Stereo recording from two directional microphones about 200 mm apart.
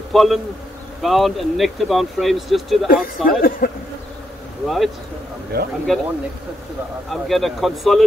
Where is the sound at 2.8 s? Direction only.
45° left (ahead or behind).